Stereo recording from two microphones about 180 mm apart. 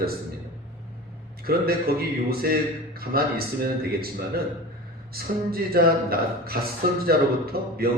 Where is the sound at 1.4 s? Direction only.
55° right (ahead or behind).